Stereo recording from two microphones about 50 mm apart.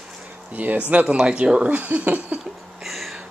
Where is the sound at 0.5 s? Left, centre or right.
Right.